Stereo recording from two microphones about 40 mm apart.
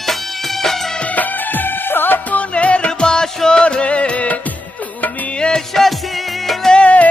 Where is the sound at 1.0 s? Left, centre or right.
Left.